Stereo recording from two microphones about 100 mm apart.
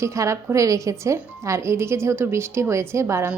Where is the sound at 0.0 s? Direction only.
30° right (ahead or behind).